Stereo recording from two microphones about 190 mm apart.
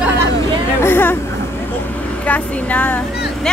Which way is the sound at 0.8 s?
10° left (ahead or behind).